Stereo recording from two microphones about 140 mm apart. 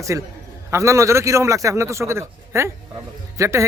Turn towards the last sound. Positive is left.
turn(degrees=-20)  # may be behind; listen again after turning